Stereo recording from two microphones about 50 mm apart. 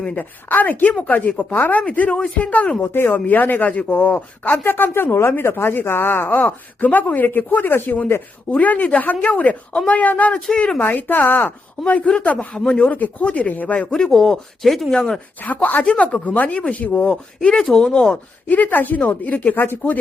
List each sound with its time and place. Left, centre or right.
0.2 s speech: left
1.8 s speech: left
2.8 s speech: left
3.1 s speech: left
3.7 s speech: left
4.6 s speech: left
8.4 s speech: left
10.8 s speech: left
11.9 s speech: left; by 14.9 s centre
15.4 s speech: left
17.6 s speech: centre
18.4 s speech: left
19.5 s speech: left